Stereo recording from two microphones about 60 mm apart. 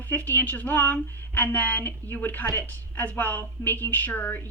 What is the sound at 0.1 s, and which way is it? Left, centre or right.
A woman's voice, left.